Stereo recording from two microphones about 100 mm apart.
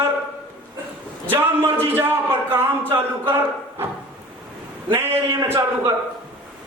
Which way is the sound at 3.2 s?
20° right (ahead or behind).